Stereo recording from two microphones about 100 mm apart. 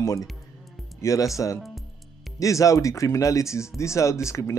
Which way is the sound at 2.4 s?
35° left (ahead or behind).